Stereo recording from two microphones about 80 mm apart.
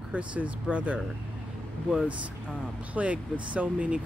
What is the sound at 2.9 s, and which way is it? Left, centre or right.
Speech, centre.